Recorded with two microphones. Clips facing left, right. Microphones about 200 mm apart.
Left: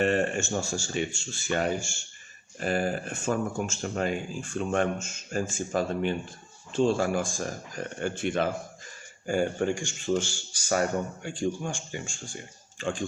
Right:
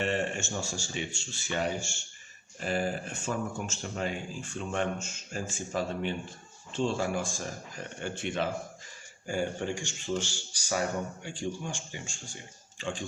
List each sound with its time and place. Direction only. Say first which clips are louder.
0.0 s speech: left 5 dB; 50° left (ahead or behind)